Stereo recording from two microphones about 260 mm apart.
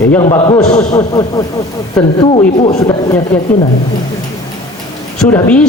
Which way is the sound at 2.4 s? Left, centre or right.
Left.